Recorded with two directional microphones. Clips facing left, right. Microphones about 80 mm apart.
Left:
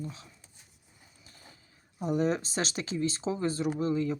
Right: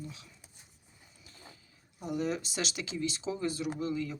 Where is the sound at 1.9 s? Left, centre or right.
Left.